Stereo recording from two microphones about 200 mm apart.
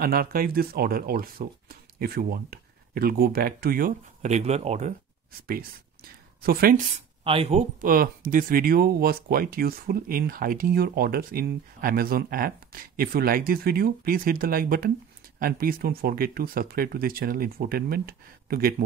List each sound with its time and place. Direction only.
0.0 s speech: 50° right (ahead or behind)
6.4 s speech: 50° right (ahead or behind)
7.2 s speech: 30° right (ahead or behind); by 18.9 s 45° right (ahead or behind)